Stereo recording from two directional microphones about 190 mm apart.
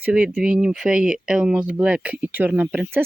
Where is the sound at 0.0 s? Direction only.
5° right (ahead or behind).